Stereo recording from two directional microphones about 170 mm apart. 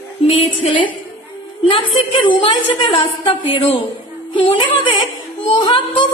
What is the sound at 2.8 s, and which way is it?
Speech, 30° left (ahead or behind).